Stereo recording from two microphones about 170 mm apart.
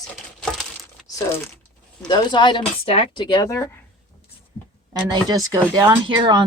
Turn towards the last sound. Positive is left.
turn(degrees=-25)  # may be behind; listen again after turning